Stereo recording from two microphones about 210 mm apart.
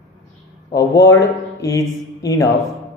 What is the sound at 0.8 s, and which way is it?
A man's voice, 15° left (ahead or behind).